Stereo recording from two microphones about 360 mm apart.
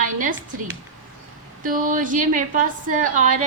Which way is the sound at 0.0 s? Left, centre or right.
Right.